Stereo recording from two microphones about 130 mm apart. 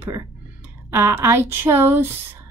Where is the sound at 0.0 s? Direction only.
20° right (ahead or behind).